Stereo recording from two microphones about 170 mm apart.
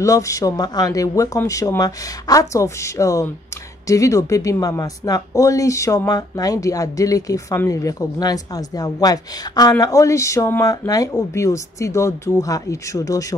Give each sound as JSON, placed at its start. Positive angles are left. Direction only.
{"t": 0.0, "sound": "speech", "side_deg": 20}